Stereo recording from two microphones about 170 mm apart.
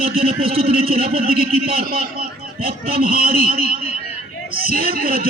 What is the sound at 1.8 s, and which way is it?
Speech, 60° right (ahead or behind).